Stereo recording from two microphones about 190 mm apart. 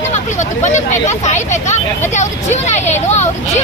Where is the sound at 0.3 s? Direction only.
40° left (ahead or behind).